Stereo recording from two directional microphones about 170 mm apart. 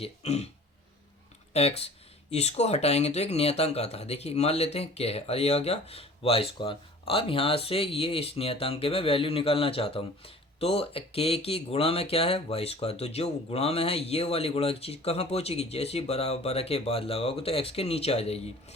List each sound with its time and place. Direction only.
0.0 s speech: 40° left (ahead or behind)
1.5 s speech: 40° left (ahead or behind)